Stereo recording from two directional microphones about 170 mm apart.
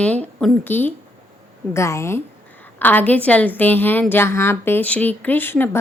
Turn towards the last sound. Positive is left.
turn(degrees=10)  # may be behind; listen again after turning